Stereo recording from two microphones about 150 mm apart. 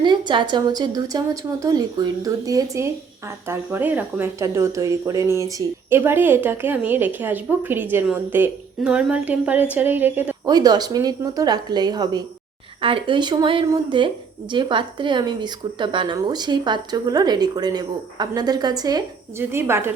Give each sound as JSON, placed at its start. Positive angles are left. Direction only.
{"t": 0.0, "sound": "a woman's voice", "side_deg": -30}
{"t": 10.4, "sound": "a woman's voice", "side_deg": -25}
{"t": 19.4, "sound": "a woman's voice", "side_deg": -15}